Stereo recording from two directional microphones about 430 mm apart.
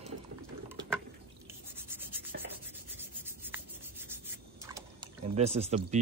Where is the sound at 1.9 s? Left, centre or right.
Centre.